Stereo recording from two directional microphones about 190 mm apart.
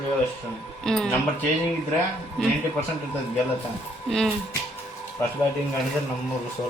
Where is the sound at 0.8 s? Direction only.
5° left (ahead or behind).